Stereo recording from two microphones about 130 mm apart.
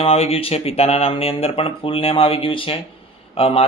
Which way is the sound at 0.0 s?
50° left (ahead or behind).